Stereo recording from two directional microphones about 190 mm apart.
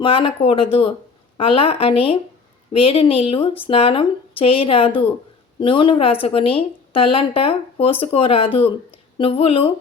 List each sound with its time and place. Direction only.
0.0 s speech: 30° left (ahead or behind)